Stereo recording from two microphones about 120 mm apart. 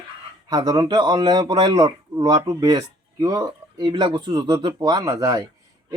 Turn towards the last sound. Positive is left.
turn(degrees=-30)  # may be behind; listen again after turning